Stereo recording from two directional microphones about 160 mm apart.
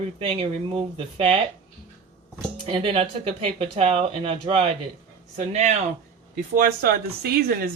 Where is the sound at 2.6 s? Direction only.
35° right (ahead or behind).